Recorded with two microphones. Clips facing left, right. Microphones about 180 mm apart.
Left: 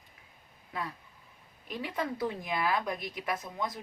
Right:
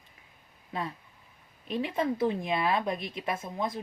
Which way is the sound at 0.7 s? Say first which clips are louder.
Right 3 dB; 25° right (ahead or behind).